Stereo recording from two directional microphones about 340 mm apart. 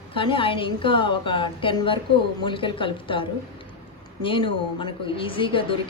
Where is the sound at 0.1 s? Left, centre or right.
Centre.